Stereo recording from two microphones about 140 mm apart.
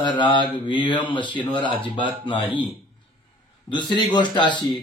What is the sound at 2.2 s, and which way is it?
Speech, 35° left (ahead or behind).